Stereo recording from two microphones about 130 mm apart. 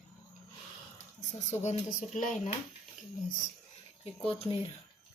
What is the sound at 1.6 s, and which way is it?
Speech, 60° left (ahead or behind).